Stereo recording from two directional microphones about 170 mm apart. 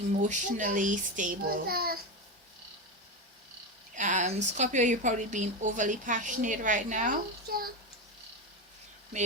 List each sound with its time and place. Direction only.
0.2 s a woman's voice: 45° right (ahead or behind); by 2.0 s 60° right (ahead or behind)
3.9 s a woman's voice: 45° right (ahead or behind)